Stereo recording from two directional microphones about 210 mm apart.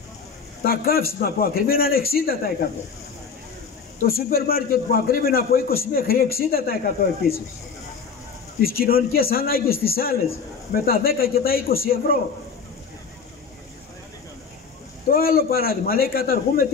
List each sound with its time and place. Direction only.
0.7 s a man's voice: 45° left (ahead or behind)
4.0 s a man's voice: 45° left (ahead or behind)
8.5 s a man's voice: 45° left (ahead or behind)
15.0 s a man's voice: 45° left (ahead or behind)